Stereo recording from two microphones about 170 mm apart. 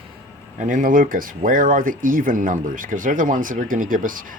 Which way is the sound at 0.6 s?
50° right (ahead or behind).